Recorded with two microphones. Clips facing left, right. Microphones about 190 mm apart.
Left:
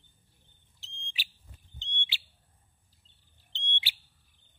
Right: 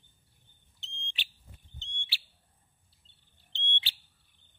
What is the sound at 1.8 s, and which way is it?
Fire alarm, 15° left (ahead or behind).